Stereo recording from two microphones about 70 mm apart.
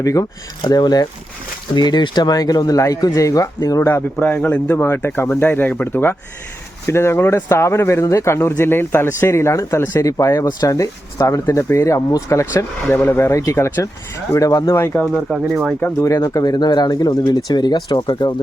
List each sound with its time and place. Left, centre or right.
0.0 s speech: left
0.6 s speech: left
1.7 s speech: left
4.2 s speech: left
13.0 s speech: left
13.3 s speech: left
14.3 s speech: left
14.7 s speech: left
15.3 s speech: centre
16.0 s speech: left